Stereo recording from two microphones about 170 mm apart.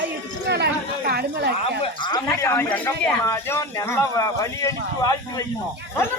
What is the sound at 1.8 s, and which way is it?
Speech, 25° left (ahead or behind).